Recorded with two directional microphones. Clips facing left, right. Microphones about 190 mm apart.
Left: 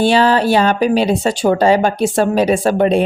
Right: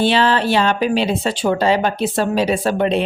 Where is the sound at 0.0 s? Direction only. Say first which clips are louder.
Left 4 dB; 40° left (ahead or behind).